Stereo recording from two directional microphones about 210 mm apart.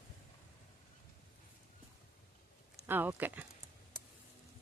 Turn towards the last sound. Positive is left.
turn(degrees=-10)  # may be behind; listen again after turning